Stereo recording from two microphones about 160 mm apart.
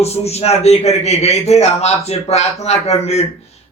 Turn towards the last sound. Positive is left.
turn(degrees=40)  # may be behind; listen again after turning